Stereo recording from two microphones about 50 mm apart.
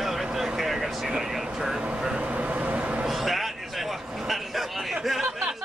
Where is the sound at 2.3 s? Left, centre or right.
Right.